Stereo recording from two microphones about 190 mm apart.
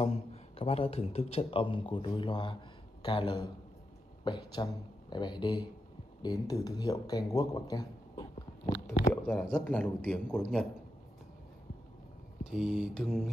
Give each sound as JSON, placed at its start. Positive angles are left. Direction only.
{"t": 0.0, "sound": "speech", "side_deg": 30}
{"t": 9.1, "sound": "speech", "side_deg": 5}
{"t": 12.4, "sound": "speech", "side_deg": 0}